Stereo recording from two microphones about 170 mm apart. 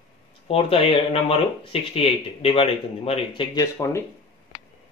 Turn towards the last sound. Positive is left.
turn(degrees=20)  # may be behind; listen again after turning